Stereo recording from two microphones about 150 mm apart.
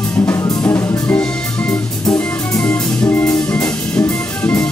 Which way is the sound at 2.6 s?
10° left (ahead or behind).